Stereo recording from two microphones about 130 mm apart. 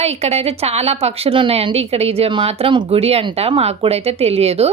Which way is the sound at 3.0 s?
50° right (ahead or behind).